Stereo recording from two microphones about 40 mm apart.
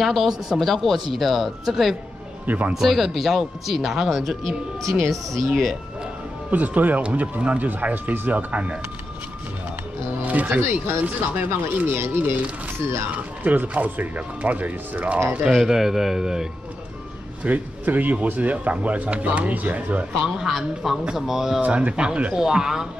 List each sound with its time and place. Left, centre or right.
0.6 s speech: centre
2.4 s speech: right
2.7 s speech: centre
6.5 s speech: right
10.2 s music: right
10.6 s speech: right
11.0 s speech: right
11.9 s speech: right
13.1 s speech: right
15.5 s speech: centre
17.4 s speech: right
20.4 s speech: centre
21.5 s speech: right
22.3 s speech: centre